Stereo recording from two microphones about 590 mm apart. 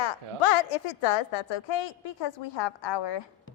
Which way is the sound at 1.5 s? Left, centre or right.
Left.